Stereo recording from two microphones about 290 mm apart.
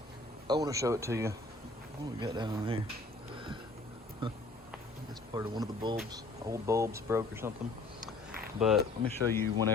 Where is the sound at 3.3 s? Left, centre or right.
Centre.